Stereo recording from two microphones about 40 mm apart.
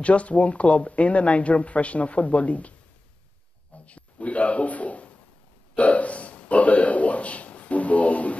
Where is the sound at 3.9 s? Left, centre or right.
Left.